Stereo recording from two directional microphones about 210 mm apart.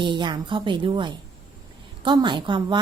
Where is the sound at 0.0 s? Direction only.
20° right (ahead or behind).